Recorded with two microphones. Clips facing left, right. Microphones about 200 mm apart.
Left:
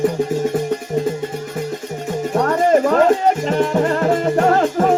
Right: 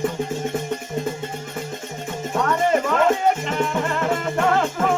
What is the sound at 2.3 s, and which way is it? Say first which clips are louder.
Music: left 5 dB; 40° left (ahead or behind).